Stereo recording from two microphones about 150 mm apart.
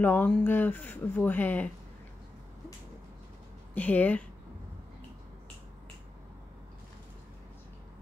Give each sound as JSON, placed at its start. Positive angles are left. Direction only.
{"t": 0.0, "sound": "speech", "side_deg": 15}
{"t": 3.7, "sound": "speech", "side_deg": 10}